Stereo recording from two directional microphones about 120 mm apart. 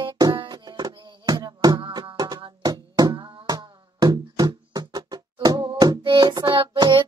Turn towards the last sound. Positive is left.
turn(degrees=-40)  # may be behind; listen again after turning